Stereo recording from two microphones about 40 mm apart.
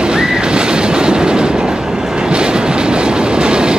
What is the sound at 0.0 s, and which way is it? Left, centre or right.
Train, centre.